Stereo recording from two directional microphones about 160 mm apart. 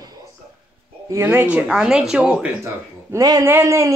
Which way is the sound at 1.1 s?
15° right (ahead or behind).